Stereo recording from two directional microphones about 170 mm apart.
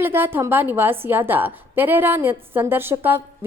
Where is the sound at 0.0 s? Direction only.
15° right (ahead or behind).